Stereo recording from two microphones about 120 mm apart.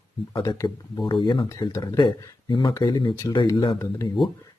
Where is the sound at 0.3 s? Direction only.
35° left (ahead or behind).